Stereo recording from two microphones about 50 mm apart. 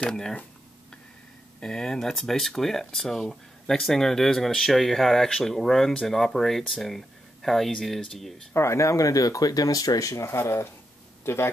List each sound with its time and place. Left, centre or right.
0.1 s speech: centre
1.6 s speech: centre
8.5 s speech: left
10.3 s speech: left